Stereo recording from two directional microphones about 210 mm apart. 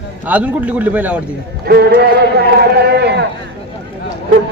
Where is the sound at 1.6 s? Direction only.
50° right (ahead or behind).